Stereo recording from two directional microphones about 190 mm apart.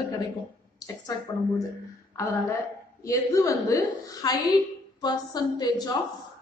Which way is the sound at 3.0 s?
15° left (ahead or behind).